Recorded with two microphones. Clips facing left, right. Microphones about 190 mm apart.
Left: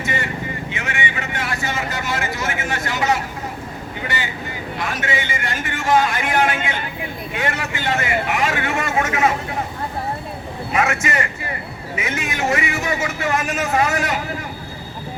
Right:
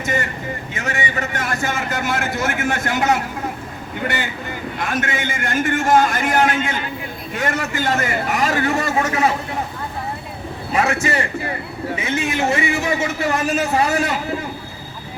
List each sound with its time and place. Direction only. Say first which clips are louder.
0.0 s vehicle: right 2 dB; 45° right (ahead or behind)
4.8 s a man's voice: right 1 dB; 50° right (ahead or behind); by 9.3 s 35° right (ahead or behind)
10.7 s a man's voice: right 2 dB; 30° right (ahead or behind)